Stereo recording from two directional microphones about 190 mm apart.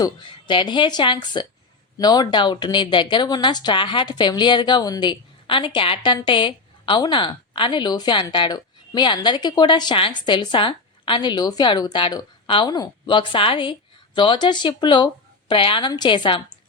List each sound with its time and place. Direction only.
0.0 s a woman's voice: 25° left (ahead or behind)